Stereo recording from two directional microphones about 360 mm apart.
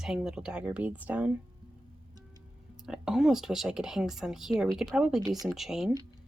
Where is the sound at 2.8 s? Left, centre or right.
Centre.